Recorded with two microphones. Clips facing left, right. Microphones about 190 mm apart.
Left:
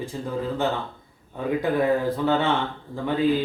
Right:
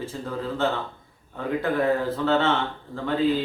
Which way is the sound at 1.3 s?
15° left (ahead or behind).